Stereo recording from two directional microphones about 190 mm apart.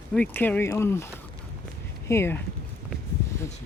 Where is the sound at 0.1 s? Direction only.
10° left (ahead or behind).